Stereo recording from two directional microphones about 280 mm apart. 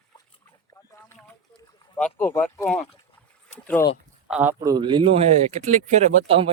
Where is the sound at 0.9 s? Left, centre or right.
Centre.